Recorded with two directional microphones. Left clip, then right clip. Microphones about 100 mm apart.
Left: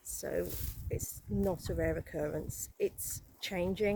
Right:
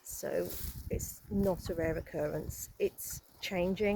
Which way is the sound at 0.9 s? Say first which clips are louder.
Right 1 dB; 25° left (ahead or behind).